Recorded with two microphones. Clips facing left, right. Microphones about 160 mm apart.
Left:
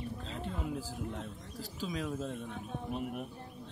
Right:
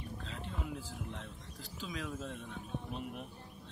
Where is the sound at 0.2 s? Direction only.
35° left (ahead or behind).